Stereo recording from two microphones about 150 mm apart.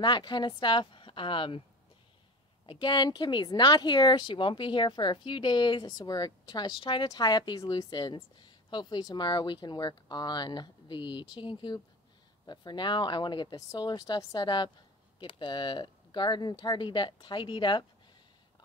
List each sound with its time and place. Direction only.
0.0 s speech: 30° left (ahead or behind)
2.6 s speech: 35° left (ahead or behind)